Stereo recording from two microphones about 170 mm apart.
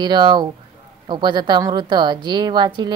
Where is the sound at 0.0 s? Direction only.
25° right (ahead or behind).